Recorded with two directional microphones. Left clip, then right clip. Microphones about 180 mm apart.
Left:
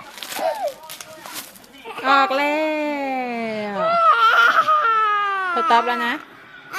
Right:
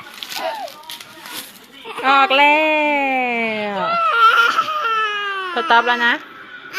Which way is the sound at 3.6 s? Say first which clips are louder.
Even; 10° left (ahead or behind).